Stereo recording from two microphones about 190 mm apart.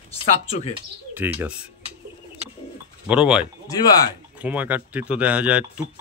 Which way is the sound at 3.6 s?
20° left (ahead or behind).